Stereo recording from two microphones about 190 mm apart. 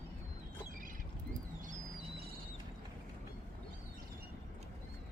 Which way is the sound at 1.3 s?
40° right (ahead or behind).